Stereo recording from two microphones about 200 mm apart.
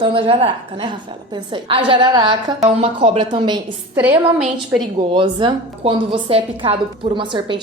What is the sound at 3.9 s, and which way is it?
Speech, 10° right (ahead or behind).